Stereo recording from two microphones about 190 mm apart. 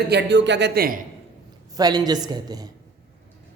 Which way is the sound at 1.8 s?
20° right (ahead or behind).